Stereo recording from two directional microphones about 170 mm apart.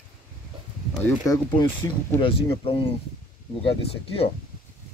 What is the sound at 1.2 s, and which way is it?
Speech, 25° left (ahead or behind).